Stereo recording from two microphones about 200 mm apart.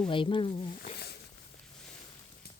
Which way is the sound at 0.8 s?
50° left (ahead or behind).